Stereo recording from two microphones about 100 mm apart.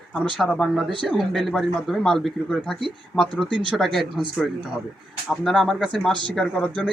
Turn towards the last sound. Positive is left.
turn(degrees=15)  # may be behind; listen again after turning